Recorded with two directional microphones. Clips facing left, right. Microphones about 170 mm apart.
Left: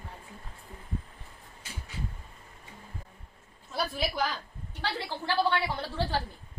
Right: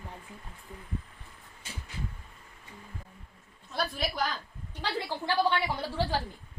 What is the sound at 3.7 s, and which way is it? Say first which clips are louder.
Speech: left 1 dB; 5° left (ahead or behind).